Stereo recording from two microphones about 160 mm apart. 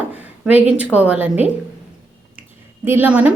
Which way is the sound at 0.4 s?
10° right (ahead or behind).